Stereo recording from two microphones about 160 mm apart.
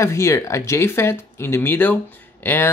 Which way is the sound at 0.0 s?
15° left (ahead or behind).